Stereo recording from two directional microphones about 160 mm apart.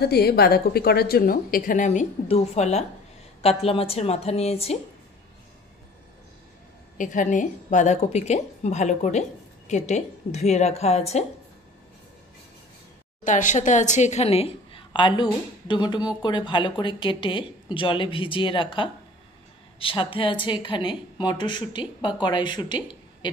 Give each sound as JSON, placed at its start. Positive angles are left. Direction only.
{"t": 0.0, "sound": "a woman's voice", "side_deg": 80}
{"t": 7.0, "sound": "a woman's voice", "side_deg": 55}
{"t": 13.2, "sound": "a woman's voice", "side_deg": 50}